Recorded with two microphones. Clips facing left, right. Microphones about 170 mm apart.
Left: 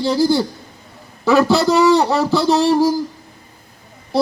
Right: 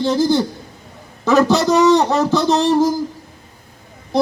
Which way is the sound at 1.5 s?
20° right (ahead or behind).